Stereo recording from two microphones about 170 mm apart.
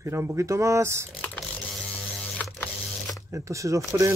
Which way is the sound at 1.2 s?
5° left (ahead or behind).